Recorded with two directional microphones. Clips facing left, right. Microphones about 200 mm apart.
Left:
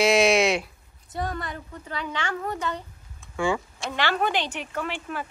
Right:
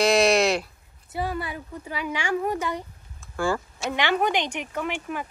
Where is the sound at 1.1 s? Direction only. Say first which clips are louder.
Right 2 dB; 10° right (ahead or behind).